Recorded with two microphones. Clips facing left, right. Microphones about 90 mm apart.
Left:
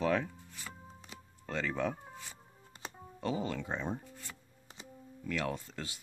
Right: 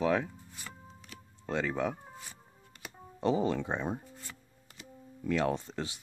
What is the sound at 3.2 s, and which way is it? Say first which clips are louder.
Speech: right 7 dB; 25° right (ahead or behind).